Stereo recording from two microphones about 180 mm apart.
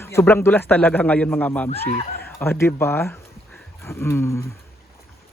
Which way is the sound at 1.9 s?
45° left (ahead or behind).